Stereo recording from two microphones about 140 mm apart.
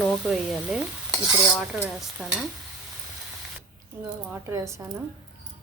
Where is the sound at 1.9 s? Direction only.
Centre (ahead or behind).